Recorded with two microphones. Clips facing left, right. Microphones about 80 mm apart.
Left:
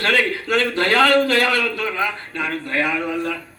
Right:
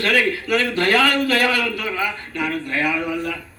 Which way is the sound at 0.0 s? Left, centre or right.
Left.